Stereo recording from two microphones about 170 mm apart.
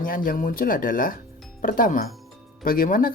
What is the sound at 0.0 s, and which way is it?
Speech, 55° left (ahead or behind).